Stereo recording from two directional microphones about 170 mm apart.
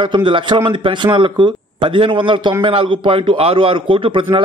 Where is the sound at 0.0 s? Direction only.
30° right (ahead or behind).